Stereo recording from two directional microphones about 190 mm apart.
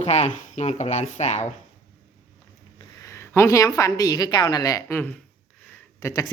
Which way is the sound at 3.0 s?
15° left (ahead or behind).